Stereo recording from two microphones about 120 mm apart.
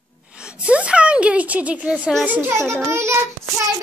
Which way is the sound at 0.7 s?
10° right (ahead or behind).